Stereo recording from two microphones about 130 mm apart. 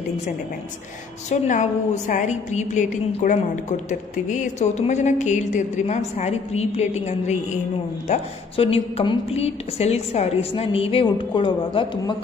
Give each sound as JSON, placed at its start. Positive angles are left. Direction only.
{"t": 1.3, "sound": "a woman's voice", "side_deg": 70}